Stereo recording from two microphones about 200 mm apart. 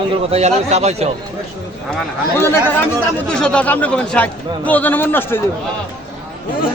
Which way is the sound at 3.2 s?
5° left (ahead or behind).